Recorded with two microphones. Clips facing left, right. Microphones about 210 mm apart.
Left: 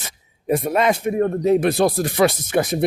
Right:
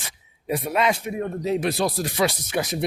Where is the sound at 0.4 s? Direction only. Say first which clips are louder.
Left 4 dB; 50° left (ahead or behind).